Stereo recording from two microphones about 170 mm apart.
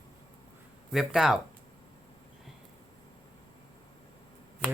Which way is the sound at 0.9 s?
Centre (ahead or behind).